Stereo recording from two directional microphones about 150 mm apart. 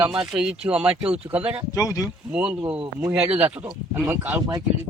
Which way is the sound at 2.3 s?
10° right (ahead or behind).